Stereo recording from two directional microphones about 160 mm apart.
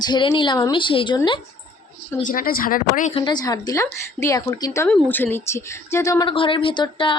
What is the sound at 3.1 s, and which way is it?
A woman's voice, 30° left (ahead or behind).